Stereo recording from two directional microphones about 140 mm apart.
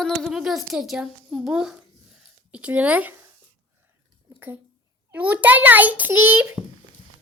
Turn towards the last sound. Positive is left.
turn(degrees=-10)  # may be behind; listen again after turning